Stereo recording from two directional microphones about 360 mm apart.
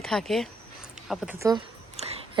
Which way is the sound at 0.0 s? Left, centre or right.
Centre.